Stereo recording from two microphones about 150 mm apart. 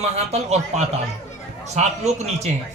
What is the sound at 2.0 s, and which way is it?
Speech, 50° right (ahead or behind).